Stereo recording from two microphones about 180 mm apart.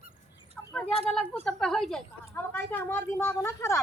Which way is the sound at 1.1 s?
Centre (ahead or behind).